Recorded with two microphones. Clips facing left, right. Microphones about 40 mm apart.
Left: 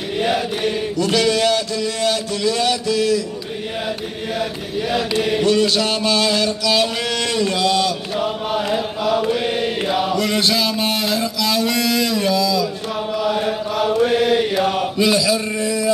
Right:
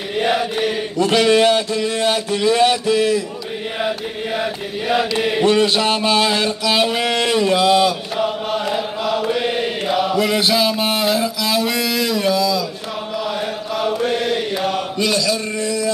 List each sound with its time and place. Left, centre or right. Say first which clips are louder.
0.2 s chant: right 2 dB; centre
0.9 s mantra: right 5 dB; right
4.4 s chant: even; centre
5.4 s mantra: right 3 dB; right
8.2 s chant: right 1 dB; centre